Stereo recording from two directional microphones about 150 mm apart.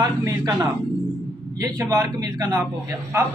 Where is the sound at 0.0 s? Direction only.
20° right (ahead or behind).